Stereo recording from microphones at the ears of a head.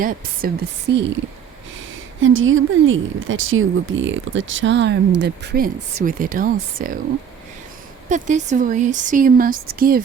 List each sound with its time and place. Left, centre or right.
0.0 s a woman's voice: right
8.3 s a woman's voice: right